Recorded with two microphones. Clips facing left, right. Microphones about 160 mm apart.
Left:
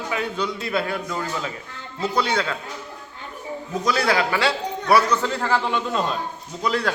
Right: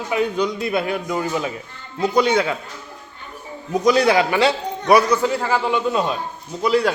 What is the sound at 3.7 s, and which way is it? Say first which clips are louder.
A man's voice: right 6 dB; 20° right (ahead or behind).